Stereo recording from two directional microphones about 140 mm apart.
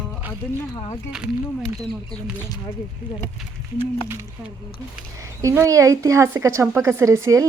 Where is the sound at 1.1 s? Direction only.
Centre (ahead or behind).